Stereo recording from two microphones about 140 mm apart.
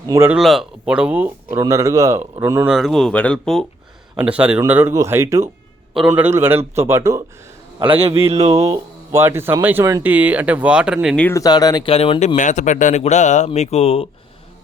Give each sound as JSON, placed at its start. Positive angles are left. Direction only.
{"t": 0.1, "sound": "speech", "side_deg": -15}
{"t": 0.3, "sound": "speech", "side_deg": -5}
{"t": 1.5, "sound": "speech", "side_deg": -20}
{"t": 2.6, "sound": "speech", "side_deg": 0}
{"t": 4.3, "sound": "speech", "side_deg": -10}
{"t": 7.9, "sound": "a man's voice", "side_deg": -45}
{"t": 8.5, "sound": "speech", "side_deg": -25}
{"t": 11.2, "sound": "speech", "side_deg": 15}
{"t": 11.4, "sound": "speech", "side_deg": 30}
{"t": 11.9, "sound": "speech", "side_deg": 40}
{"t": 12.4, "sound": "speech", "side_deg": 60}